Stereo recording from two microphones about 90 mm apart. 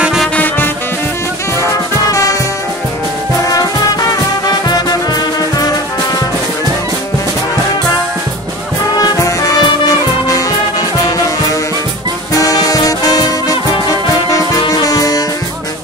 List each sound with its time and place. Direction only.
0.0 s music: 5° right (ahead or behind)
3.5 s music: 45° left (ahead or behind)
9.2 s music: 40° left (ahead or behind)
12.4 s music: 45° left (ahead or behind)
14.6 s music: 45° left (ahead or behind)